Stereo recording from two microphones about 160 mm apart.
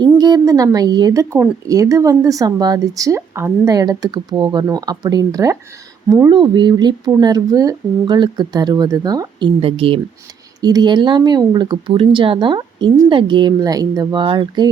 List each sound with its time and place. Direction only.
0.0 s a woman's voice: 25° right (ahead or behind)
6.3 s a woman's voice: 30° right (ahead or behind)
9.6 s speech: 35° right (ahead or behind)
10.6 s a woman's voice: 25° right (ahead or behind)